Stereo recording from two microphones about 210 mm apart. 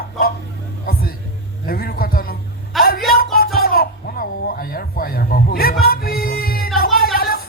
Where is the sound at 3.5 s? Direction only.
45° left (ahead or behind).